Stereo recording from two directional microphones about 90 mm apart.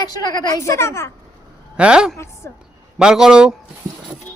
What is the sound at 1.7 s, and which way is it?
Speech, 10° right (ahead or behind).